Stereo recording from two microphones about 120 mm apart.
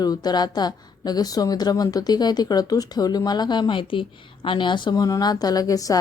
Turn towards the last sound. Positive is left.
turn(degrees=30)  # may be behind; listen again after turning